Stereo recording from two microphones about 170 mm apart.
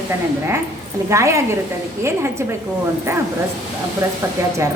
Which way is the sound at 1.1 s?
15° right (ahead or behind).